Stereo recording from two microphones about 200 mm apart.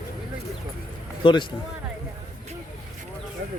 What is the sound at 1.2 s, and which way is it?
Speech, 25° left (ahead or behind).